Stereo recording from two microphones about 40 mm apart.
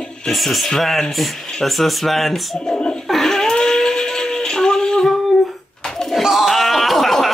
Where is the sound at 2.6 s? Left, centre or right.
Centre.